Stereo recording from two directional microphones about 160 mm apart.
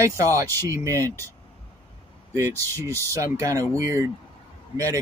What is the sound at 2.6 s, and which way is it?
Speech, 15° left (ahead or behind).